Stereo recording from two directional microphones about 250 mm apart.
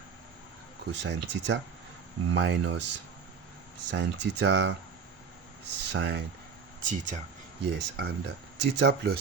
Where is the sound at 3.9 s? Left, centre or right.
Right.